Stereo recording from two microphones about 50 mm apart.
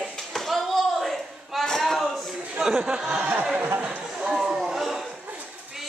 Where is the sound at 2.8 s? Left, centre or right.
Centre.